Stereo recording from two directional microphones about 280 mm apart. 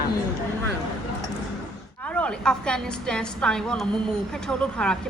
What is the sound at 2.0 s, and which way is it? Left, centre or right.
A woman's voice, centre.